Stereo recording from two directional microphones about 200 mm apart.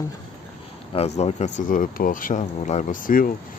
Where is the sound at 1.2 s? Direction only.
35° left (ahead or behind).